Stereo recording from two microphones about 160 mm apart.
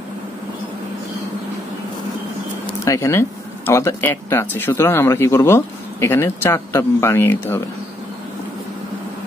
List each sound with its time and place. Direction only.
2.8 s speech: 20° left (ahead or behind)